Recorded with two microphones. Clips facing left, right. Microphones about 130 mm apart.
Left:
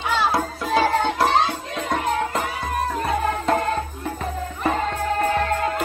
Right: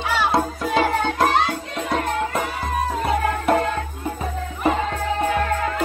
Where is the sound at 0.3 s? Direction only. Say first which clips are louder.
Right 1 dB; 20° right (ahead or behind).